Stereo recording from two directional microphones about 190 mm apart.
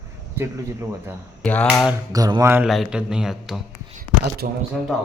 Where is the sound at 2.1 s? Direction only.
20° right (ahead or behind).